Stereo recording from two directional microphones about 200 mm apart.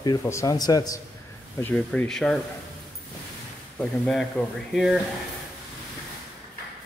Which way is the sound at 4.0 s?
5° left (ahead or behind).